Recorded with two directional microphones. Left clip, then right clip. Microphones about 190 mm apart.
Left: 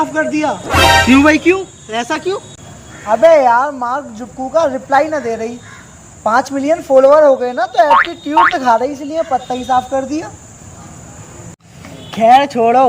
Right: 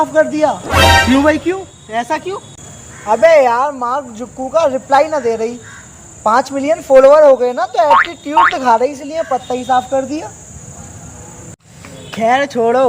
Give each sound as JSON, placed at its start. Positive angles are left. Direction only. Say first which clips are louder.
{"t": 0.0, "sound": "speech", "louder": "right 3 dB", "side_deg": -15}
{"t": 0.6, "sound": "speech", "louder": "left 2 dB", "side_deg": 0}
{"t": 3.1, "sound": "speech", "louder": "left 1 dB", "side_deg": -25}
{"t": 7.9, "sound": "speech", "louder": "right 2 dB", "side_deg": 0}
{"t": 8.1, "sound": "speech", "louder": "even", "side_deg": -15}
{"t": 12.1, "sound": "speech", "louder": "left 4 dB", "side_deg": 10}